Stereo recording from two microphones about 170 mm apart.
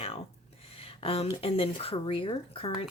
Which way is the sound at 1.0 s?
35° left (ahead or behind).